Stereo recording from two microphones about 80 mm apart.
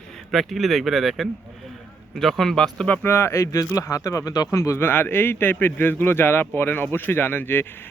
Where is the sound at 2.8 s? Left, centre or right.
Left.